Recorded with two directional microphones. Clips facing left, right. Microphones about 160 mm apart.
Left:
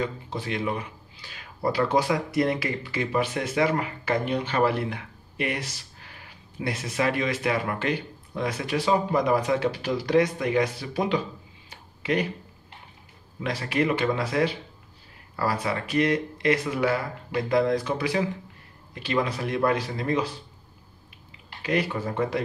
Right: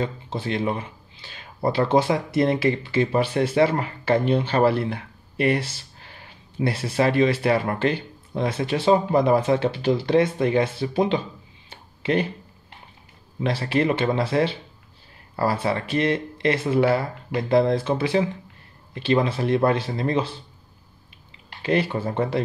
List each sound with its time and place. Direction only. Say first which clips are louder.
0.0 s speech: right 3 dB; 30° right (ahead or behind)
11.7 s a sound: right 3 dB; 30° right (ahead or behind)
13.4 s speech: right 3 dB; 30° right (ahead or behind)
21.6 s speech: right 4 dB; 30° right (ahead or behind)